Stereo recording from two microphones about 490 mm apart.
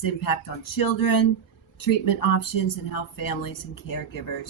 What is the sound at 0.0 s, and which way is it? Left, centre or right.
Speech, left.